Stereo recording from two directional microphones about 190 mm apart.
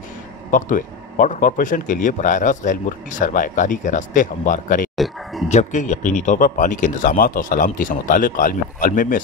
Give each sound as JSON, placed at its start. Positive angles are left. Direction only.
{"t": 0.5, "sound": "speech", "side_deg": 45}
{"t": 4.9, "sound": "a sound", "side_deg": 0}
{"t": 5.5, "sound": "speech", "side_deg": 40}